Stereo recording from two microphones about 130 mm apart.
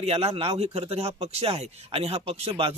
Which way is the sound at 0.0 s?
50° right (ahead or behind).